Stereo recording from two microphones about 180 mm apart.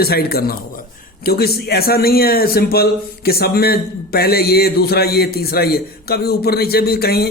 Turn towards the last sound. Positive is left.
turn(degrees=60)  # may be behind; listen again after turning